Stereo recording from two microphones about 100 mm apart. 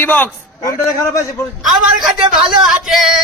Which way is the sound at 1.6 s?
5° right (ahead or behind).